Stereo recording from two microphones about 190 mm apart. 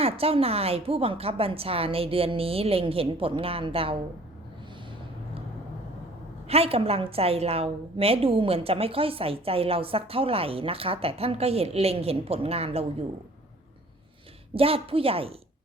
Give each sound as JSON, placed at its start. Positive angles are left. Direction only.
{"t": 0.0, "sound": "a woman's voice", "side_deg": -30}
{"t": 6.5, "sound": "a woman's voice", "side_deg": -30}
{"t": 14.5, "sound": "a woman's voice", "side_deg": -30}